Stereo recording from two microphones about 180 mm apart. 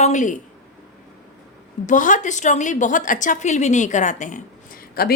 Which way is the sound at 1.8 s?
45° left (ahead or behind).